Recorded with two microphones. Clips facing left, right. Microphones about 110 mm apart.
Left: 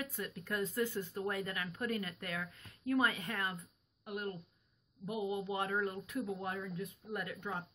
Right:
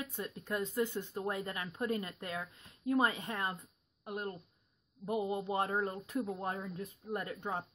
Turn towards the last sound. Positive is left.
turn(degrees=-30)  # may be behind; listen again after turning